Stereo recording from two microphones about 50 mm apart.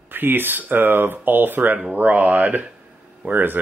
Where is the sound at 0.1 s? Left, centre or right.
Right.